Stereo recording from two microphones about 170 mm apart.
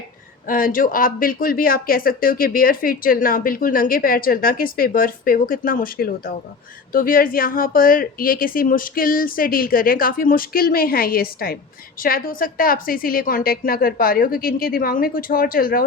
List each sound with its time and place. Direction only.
0.4 s speech: 55° left (ahead or behind)